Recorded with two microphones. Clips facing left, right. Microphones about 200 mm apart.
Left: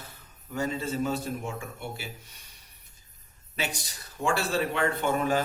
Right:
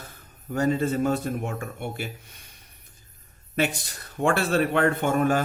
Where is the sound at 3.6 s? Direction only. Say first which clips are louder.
Right 8 dB; 55° right (ahead or behind).